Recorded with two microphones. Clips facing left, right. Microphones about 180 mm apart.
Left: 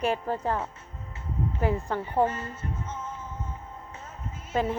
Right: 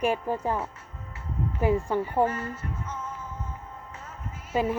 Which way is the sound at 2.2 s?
25° left (ahead or behind).